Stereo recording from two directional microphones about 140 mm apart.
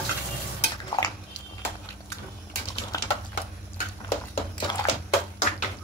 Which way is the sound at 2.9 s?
25° left (ahead or behind).